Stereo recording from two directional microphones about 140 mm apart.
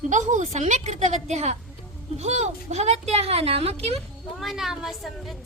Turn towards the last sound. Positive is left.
turn(degrees=0)  # may be behind; listen again after turning